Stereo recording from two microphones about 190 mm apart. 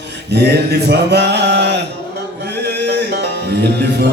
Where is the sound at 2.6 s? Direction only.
60° right (ahead or behind).